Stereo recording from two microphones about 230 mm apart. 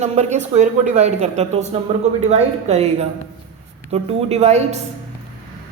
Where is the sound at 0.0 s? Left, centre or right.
Right.